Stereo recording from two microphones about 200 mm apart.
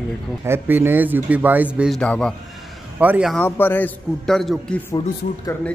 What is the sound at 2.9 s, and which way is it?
Speech, 5° right (ahead or behind).